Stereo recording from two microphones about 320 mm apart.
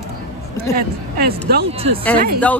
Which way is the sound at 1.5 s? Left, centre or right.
Right.